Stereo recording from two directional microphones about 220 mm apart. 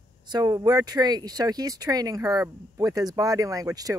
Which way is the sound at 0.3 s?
15° right (ahead or behind).